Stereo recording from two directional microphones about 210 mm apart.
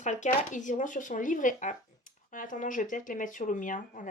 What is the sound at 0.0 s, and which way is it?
Speech, 35° left (ahead or behind).